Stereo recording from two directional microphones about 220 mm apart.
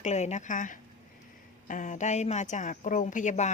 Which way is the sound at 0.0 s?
30° left (ahead or behind).